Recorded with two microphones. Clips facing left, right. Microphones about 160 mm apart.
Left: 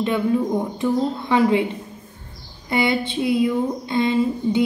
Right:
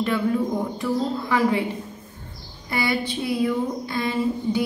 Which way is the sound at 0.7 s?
20° left (ahead or behind).